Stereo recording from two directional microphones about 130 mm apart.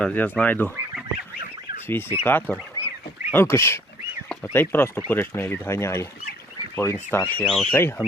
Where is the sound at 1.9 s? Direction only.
15° left (ahead or behind).